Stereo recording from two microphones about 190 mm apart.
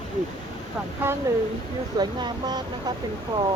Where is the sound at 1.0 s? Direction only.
10° right (ahead or behind).